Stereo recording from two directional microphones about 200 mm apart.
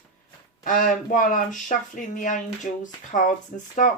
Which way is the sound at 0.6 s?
40° left (ahead or behind).